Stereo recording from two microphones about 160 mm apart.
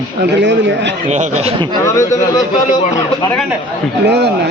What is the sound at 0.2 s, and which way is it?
Speech, 90° right.